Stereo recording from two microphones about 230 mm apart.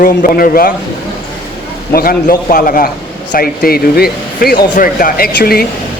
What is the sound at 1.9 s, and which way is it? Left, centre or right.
A man's voice, left.